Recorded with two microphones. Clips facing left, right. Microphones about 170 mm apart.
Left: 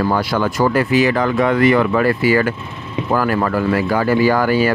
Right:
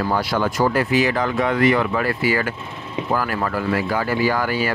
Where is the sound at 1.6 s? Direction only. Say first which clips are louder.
Left 4 dB; 60° left (ahead or behind).